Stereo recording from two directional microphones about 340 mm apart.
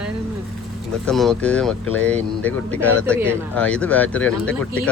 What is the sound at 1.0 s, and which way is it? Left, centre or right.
Speech, centre.